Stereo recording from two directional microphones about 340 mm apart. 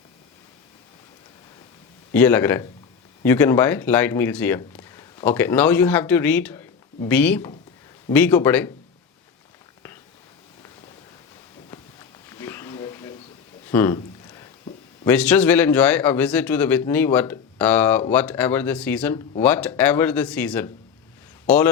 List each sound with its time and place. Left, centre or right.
2.1 s speech: centre
12.3 s a sound: centre
15.0 s speech: centre